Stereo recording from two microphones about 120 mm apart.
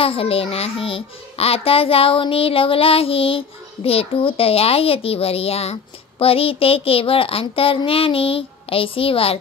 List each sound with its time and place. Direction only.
0.0 s a child's voice: 50° left (ahead or behind)